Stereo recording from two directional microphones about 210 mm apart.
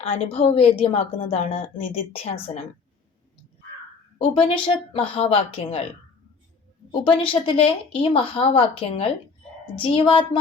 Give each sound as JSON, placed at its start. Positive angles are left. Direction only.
{"t": 0.0, "sound": "a woman's voice", "side_deg": 25}
{"t": 4.2, "sound": "a woman's voice", "side_deg": 25}
{"t": 6.9, "sound": "a woman's voice", "side_deg": 25}